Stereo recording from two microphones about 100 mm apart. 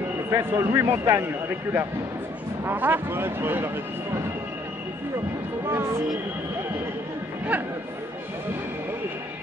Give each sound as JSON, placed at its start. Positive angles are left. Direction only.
{"t": 0.3, "sound": "speech", "side_deg": -30}